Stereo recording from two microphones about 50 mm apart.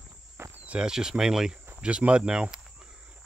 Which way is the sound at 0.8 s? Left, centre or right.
Centre.